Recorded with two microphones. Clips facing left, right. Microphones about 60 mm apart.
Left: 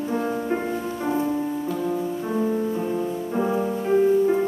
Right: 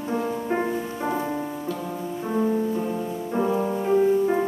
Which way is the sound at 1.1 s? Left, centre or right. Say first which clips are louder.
Left 4 dB; right.